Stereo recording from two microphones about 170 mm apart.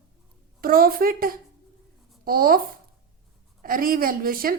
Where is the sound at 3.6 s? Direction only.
55° right (ahead or behind).